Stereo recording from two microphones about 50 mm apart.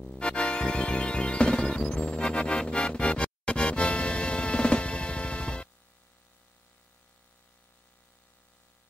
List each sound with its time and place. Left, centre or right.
0.0 s music: centre